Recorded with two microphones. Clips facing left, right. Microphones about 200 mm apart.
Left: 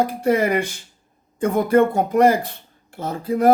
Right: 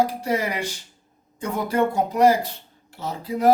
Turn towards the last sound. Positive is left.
turn(degrees=50)  # may be behind; listen again after turning